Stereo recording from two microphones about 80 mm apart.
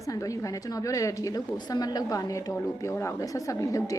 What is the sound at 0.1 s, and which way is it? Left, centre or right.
A woman's voice, left.